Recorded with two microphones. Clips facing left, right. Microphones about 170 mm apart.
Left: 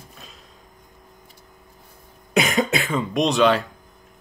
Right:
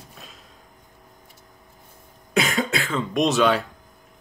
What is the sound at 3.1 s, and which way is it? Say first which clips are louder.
Speech: left 1 dB; centre (ahead or behind).